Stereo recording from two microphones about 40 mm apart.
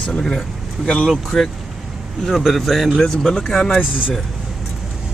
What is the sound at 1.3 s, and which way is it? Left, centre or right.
Speech, centre.